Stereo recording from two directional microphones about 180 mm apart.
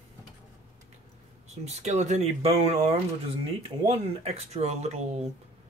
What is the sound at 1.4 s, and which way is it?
Speech, 35° right (ahead or behind).